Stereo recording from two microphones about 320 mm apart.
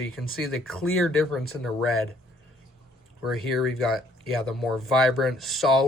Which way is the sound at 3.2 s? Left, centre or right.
Centre.